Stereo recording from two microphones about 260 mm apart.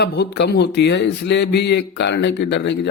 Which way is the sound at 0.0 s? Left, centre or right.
Left.